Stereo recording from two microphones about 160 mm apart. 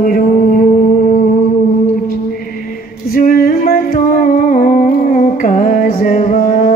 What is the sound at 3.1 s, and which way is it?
Music, 65° left (ahead or behind).